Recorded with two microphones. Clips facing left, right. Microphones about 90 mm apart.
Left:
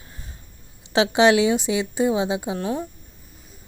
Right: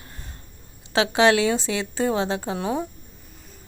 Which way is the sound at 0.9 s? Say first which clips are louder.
Left 2 dB; 20° left (ahead or behind).